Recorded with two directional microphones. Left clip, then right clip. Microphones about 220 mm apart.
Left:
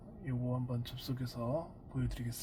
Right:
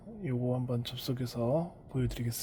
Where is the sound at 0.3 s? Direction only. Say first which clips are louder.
Right 7 dB; 55° right (ahead or behind).